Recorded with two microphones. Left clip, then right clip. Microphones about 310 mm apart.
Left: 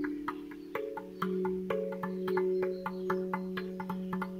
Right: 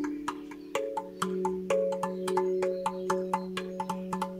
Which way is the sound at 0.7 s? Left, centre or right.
Centre.